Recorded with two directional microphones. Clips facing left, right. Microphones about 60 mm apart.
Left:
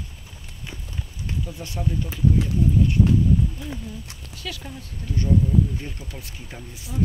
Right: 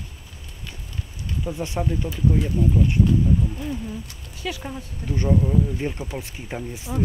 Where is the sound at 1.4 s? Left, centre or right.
Right.